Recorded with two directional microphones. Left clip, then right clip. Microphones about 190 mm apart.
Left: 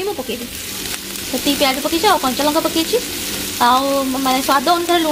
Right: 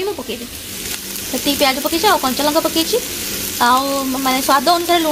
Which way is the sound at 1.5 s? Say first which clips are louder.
Right 1 dB; centre (ahead or behind).